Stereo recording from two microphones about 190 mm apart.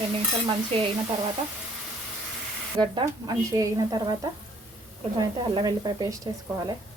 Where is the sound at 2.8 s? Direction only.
20° right (ahead or behind).